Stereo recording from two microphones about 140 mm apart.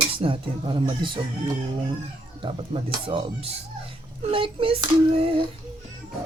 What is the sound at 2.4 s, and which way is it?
Speech, 35° right (ahead or behind).